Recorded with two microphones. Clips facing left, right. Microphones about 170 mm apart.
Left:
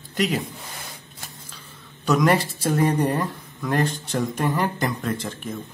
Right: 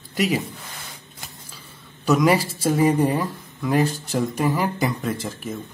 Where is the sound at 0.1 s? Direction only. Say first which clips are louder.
Right 1 dB; 5° right (ahead or behind).